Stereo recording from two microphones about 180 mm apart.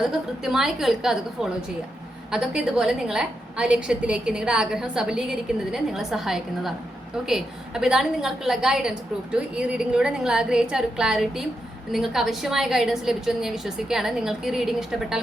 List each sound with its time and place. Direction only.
0.0 s a woman's voice: centre (ahead or behind)